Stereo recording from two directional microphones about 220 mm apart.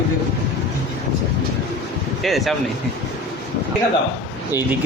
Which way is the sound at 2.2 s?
Centre (ahead or behind).